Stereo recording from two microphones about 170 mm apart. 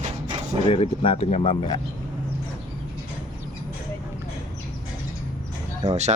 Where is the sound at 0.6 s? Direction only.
35° left (ahead or behind).